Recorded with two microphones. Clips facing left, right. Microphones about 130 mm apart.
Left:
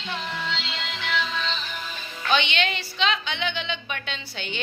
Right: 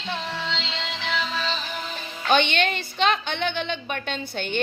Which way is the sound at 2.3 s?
50° right (ahead or behind).